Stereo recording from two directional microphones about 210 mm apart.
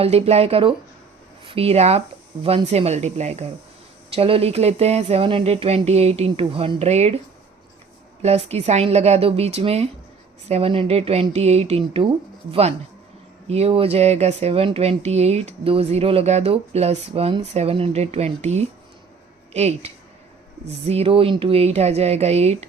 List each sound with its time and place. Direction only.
0.0 s speech: 30° right (ahead or behind)
8.2 s speech: 30° right (ahead or behind)